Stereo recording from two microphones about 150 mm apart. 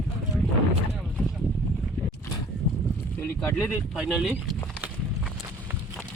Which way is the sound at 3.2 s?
15° left (ahead or behind).